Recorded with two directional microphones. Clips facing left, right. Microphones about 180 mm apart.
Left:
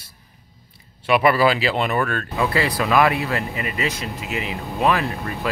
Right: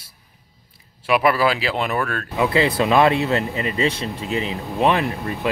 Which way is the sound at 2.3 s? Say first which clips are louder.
Right 4 dB; 20° right (ahead or behind).